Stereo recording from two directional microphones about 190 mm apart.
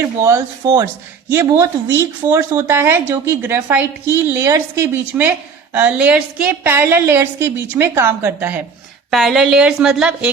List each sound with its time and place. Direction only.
0.0 s a woman's voice: 15° right (ahead or behind)